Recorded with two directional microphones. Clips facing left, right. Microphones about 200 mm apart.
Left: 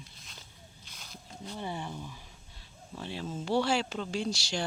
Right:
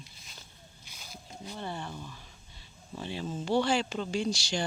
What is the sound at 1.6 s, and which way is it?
Speech, 15° left (ahead or behind).